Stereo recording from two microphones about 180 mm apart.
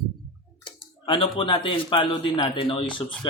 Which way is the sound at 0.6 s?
25° left (ahead or behind).